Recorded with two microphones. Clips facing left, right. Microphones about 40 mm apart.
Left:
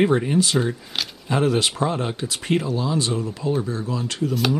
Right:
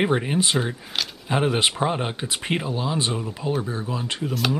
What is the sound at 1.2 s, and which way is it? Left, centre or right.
Speech, right.